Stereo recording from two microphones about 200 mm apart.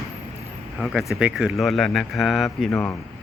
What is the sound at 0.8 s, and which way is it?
Speech, centre (ahead or behind).